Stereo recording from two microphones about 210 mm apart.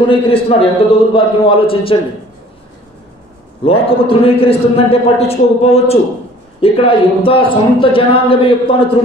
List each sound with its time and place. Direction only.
0.0 s a man's voice: 25° left (ahead or behind)
3.6 s a man's voice: 25° left (ahead or behind)